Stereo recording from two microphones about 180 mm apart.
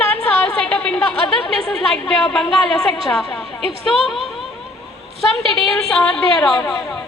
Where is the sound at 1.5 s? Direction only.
5° left (ahead or behind).